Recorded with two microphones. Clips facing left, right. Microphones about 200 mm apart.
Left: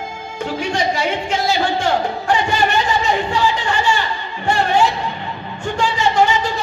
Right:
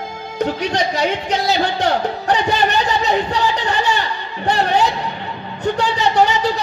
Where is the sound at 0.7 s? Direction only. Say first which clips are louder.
Right 1 dB; 40° right (ahead or behind).